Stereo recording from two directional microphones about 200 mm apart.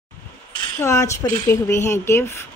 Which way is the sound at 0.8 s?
15° left (ahead or behind).